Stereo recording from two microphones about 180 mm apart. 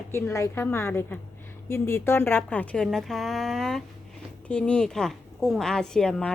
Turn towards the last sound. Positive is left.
turn(degrees=5)  # may be behind; listen again after turning